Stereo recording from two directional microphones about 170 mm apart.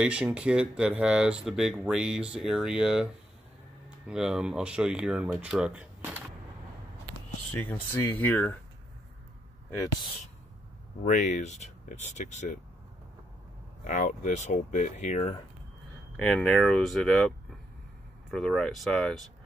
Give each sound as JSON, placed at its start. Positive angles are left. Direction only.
{"t": 0.0, "sound": "speech", "side_deg": -5}
{"t": 4.1, "sound": "speech", "side_deg": -5}
{"t": 7.5, "sound": "speech", "side_deg": 10}
{"t": 11.1, "sound": "speech", "side_deg": 45}
{"t": 13.8, "sound": "speech", "side_deg": 45}
{"t": 16.2, "sound": "speech", "side_deg": 5}
{"t": 18.3, "sound": "speech", "side_deg": 5}